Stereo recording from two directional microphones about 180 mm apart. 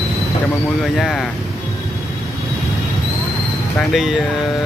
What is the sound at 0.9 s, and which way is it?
Speech, centre (ahead or behind).